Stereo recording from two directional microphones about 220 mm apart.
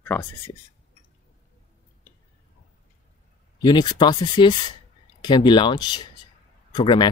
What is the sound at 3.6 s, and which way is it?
Speech, 20° left (ahead or behind).